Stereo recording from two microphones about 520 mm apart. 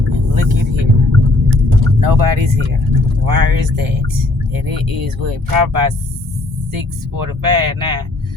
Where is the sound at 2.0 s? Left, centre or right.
Right.